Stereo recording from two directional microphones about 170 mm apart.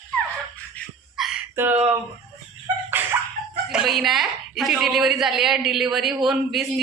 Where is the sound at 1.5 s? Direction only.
10° right (ahead or behind).